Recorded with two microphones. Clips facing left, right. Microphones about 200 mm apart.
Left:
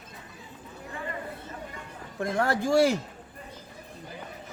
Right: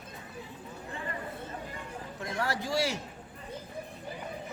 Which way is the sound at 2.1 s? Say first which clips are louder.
Left 7 dB; 55° left (ahead or behind).